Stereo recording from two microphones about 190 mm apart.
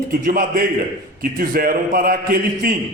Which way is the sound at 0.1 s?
45° right (ahead or behind).